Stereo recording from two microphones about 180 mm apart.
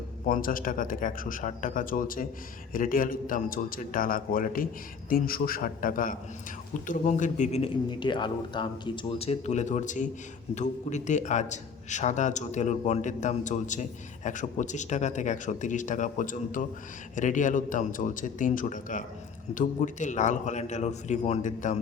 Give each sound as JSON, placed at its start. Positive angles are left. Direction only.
{"t": 0.3, "sound": "a man's voice", "side_deg": 50}